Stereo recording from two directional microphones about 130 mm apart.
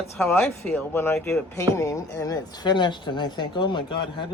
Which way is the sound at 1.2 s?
5° left (ahead or behind).